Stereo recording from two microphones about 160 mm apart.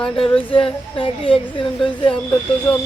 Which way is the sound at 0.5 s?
35° left (ahead or behind).